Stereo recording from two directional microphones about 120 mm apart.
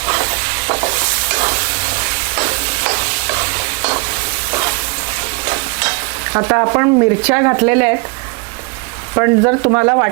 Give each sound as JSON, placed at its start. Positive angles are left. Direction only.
{"t": 0.0, "sound": "stir", "side_deg": -20}
{"t": 7.3, "sound": "speech", "side_deg": -20}
{"t": 9.1, "sound": "speech", "side_deg": -25}